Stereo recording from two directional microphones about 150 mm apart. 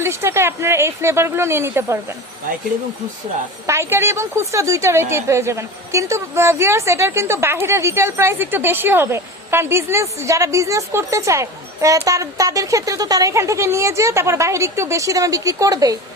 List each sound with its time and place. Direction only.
0.0 s speech: 20° right (ahead or behind)
3.7 s a woman's voice: 15° right (ahead or behind)